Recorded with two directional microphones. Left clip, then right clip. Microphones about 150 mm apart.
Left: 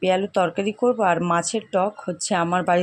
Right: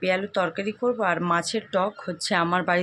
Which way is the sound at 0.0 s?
35° left (ahead or behind).